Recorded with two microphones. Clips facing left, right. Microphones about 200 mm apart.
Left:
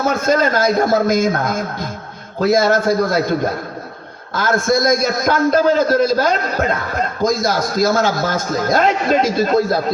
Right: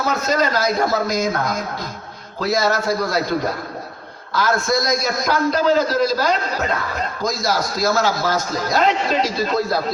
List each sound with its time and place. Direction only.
0.1 s a man's voice: 50° left (ahead or behind)
4.4 s a man's voice: 50° left (ahead or behind)